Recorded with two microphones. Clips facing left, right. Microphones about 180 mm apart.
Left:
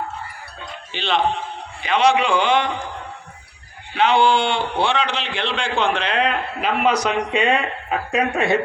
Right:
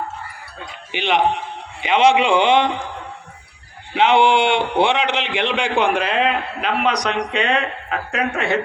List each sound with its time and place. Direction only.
0.9 s a man's voice: 15° right (ahead or behind)
3.9 s a man's voice: 25° right (ahead or behind); by 8.6 s 15° left (ahead or behind)